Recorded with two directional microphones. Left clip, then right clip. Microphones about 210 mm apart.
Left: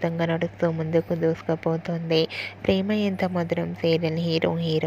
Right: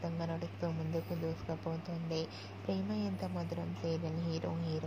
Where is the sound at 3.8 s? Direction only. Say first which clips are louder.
Left 16 dB; 35° left (ahead or behind).